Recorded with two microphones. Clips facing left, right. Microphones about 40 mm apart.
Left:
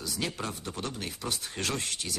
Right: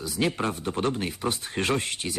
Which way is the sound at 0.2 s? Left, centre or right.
Right.